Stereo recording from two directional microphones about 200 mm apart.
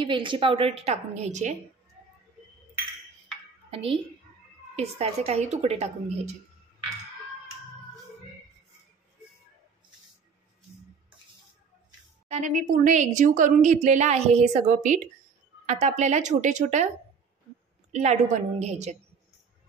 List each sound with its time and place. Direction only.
0.0 s a woman's voice: 25° right (ahead or behind)
3.7 s a woman's voice: 30° right (ahead or behind)
12.3 s a woman's voice: 40° right (ahead or behind)
17.9 s a woman's voice: 35° right (ahead or behind)